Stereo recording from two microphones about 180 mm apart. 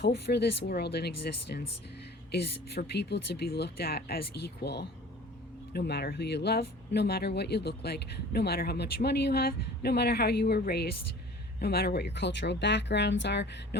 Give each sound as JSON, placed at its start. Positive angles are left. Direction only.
{"t": 0.0, "sound": "speech", "side_deg": 65}